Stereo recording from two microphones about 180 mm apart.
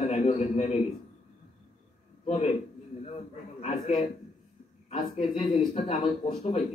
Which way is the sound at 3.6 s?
35° left (ahead or behind).